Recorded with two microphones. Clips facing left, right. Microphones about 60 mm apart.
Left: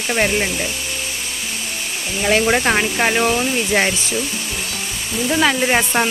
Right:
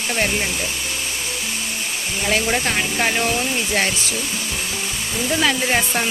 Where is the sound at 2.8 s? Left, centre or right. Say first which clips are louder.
Left 3 dB; left.